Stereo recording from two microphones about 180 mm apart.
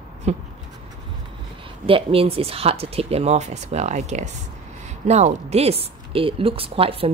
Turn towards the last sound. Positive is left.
turn(degrees=-30)  # may be behind; listen again after turning